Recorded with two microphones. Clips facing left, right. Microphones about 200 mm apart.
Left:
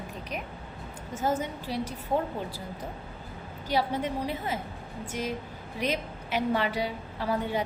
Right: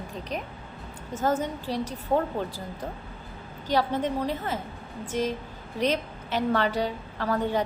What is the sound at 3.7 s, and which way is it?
Speech, 10° left (ahead or behind).